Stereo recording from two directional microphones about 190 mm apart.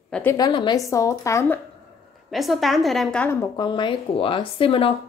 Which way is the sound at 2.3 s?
Centre (ahead or behind).